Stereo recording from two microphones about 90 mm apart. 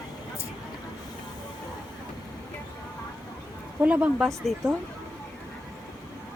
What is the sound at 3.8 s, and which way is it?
Speech, 15° right (ahead or behind).